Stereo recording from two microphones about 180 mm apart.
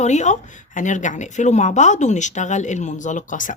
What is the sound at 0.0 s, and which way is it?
Speech, 40° left (ahead or behind).